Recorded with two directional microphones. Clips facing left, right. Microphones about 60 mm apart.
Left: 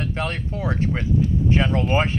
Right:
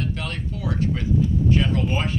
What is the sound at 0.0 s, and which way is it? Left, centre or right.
Speech, left.